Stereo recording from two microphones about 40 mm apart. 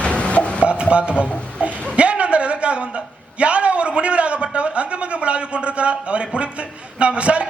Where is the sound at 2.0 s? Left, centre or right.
Right.